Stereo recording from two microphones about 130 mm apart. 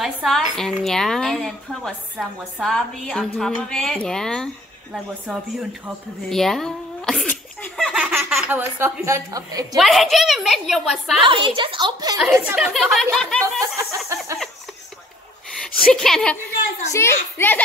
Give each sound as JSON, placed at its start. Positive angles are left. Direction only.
{"t": 0.0, "sound": "speech", "side_deg": 0}
{"t": 6.2, "sound": "sneeze", "side_deg": 5}
{"t": 8.2, "sound": "a sound", "side_deg": 0}
{"t": 8.5, "sound": "a woman's voice", "side_deg": -15}
{"t": 9.8, "sound": "speech", "side_deg": 0}
{"t": 11.2, "sound": "a woman's voice", "side_deg": -40}
{"t": 12.3, "sound": "speech", "side_deg": -15}
{"t": 12.5, "sound": "speech", "side_deg": -5}
{"t": 14.0, "sound": "a woman's voice", "side_deg": -20}
{"t": 15.5, "sound": "a sound", "side_deg": 5}
{"t": 15.9, "sound": "speech", "side_deg": 5}
{"t": 16.9, "sound": "a child's voice", "side_deg": 20}